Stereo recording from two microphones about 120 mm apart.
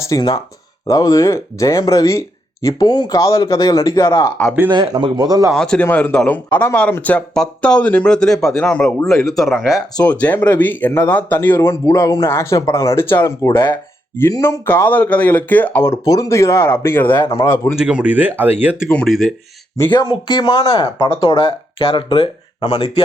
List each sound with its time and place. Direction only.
0.2 s speech: 30° left (ahead or behind)
4.7 s speech: 40° right (ahead or behind)
5.5 s speech: 5° left (ahead or behind)
9.2 s speech: centre (ahead or behind)
10.0 s speech: 10° left (ahead or behind)
13.5 s speech: 40° left (ahead or behind)
14.2 s speech: 25° left (ahead or behind)
16.0 s speech: 30° left (ahead or behind)
17.7 s speech: 10° right (ahead or behind)
19.0 s speech: centre (ahead or behind)
19.9 s speech: 40° left (ahead or behind)